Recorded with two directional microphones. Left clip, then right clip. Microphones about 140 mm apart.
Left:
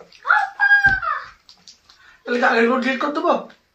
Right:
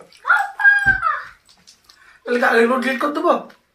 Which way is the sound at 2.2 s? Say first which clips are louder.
Right 2 dB; centre (ahead or behind).